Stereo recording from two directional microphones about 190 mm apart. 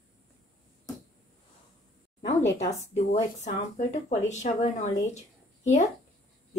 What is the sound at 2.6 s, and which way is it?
Speech, 35° left (ahead or behind).